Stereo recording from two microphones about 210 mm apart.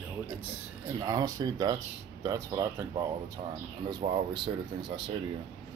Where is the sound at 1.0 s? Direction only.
15° right (ahead or behind).